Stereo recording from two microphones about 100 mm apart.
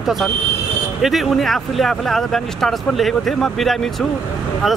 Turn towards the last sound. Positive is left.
turn(degrees=0)  # may be behind; listen again after turning